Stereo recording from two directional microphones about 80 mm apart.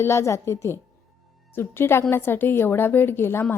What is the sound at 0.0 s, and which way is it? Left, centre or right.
A woman's voice, left.